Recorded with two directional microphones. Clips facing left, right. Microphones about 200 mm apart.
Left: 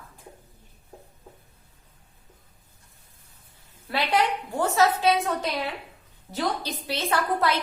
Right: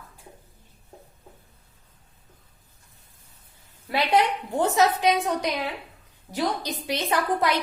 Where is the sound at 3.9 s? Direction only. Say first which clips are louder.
Right 2 dB; 20° right (ahead or behind).